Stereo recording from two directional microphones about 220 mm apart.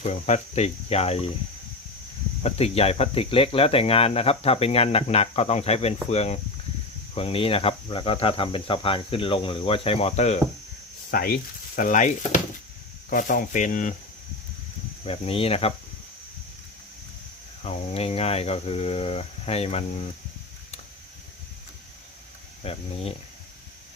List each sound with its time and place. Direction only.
0.0 s speech: 30° left (ahead or behind)
2.4 s speech: 30° left (ahead or behind)
11.1 s speech: 40° left (ahead or behind)
15.0 s speech: 25° left (ahead or behind)
17.6 s speech: 30° left (ahead or behind)
22.6 s speech: 25° left (ahead or behind)